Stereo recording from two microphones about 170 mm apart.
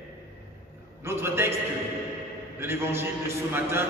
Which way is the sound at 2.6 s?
15° right (ahead or behind).